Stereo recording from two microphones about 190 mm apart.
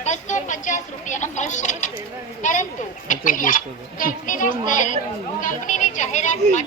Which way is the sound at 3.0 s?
45° left (ahead or behind).